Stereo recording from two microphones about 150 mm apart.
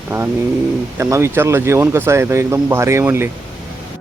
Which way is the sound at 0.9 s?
20° right (ahead or behind).